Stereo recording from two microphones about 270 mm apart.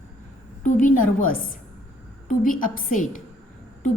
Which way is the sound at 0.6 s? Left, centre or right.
Left.